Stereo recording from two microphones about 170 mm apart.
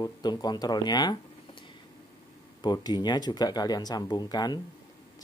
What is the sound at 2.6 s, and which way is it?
Speech, 25° left (ahead or behind).